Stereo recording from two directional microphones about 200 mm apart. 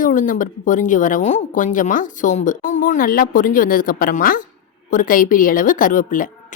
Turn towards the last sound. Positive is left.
turn(degrees=40)  # may be behind; listen again after turning